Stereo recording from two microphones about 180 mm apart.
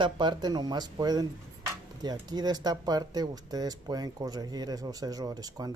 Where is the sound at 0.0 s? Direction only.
25° right (ahead or behind).